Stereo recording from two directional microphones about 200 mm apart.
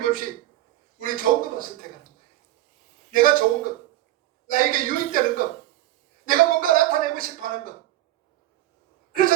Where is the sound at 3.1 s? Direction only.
45° right (ahead or behind).